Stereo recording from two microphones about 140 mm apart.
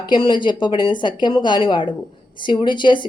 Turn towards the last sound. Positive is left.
turn(degrees=35)  # may be behind; listen again after turning